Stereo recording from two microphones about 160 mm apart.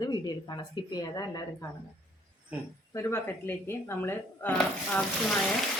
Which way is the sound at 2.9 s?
15° left (ahead or behind).